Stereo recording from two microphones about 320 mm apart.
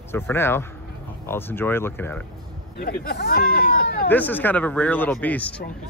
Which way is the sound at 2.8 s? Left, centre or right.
Left.